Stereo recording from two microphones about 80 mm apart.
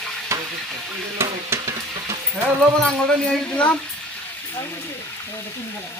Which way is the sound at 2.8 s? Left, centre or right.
Centre.